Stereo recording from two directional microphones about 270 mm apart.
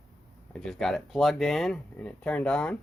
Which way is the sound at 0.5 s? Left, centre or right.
Centre.